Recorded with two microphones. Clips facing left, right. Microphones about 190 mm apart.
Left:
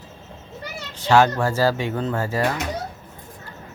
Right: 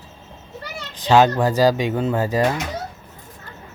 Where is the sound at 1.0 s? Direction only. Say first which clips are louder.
Right 2 dB; 20° right (ahead or behind).